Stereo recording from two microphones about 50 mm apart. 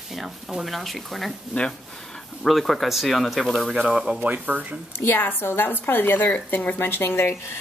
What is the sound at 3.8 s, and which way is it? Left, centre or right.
Speech, centre.